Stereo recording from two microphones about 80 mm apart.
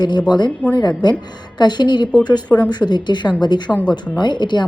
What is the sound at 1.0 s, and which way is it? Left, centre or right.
Speech, left.